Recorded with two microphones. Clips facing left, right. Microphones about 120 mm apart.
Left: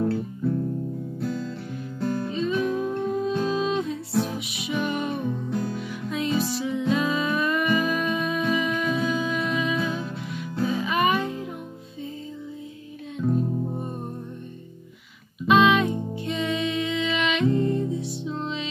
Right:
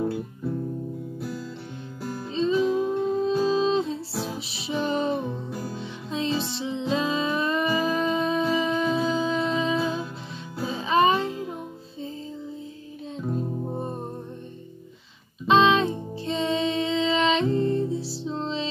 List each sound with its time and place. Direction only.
0.0 s music: 10° right (ahead or behind)
2.2 s music: 25° right (ahead or behind)
5.5 s music: 5° right (ahead or behind)
5.8 s music: 25° right (ahead or behind)
13.7 s music: 30° right (ahead or behind)
15.4 s music: 30° right (ahead or behind)